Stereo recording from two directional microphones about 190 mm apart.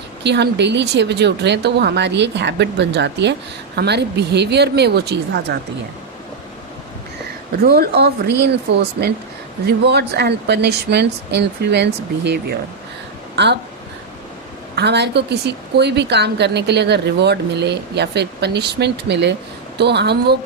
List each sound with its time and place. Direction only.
0.2 s speech: 65° right (ahead or behind)
7.6 s speech: 55° right (ahead or behind)
14.8 s speech: 60° right (ahead or behind)